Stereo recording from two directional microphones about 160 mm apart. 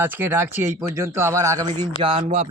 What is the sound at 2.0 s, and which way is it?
Speech, 35° right (ahead or behind).